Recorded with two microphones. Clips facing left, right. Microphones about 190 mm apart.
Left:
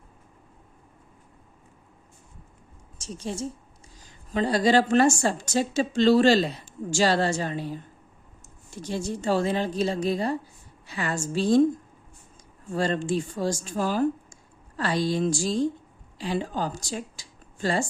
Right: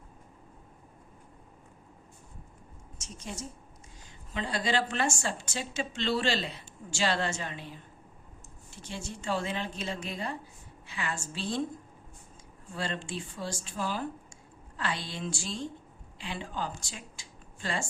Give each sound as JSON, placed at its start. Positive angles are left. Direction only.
{"t": 3.0, "sound": "a woman's voice", "side_deg": 30}
{"t": 12.7, "sound": "speech", "side_deg": 45}